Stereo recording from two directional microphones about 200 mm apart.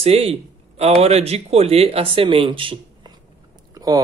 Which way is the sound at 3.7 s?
20° right (ahead or behind).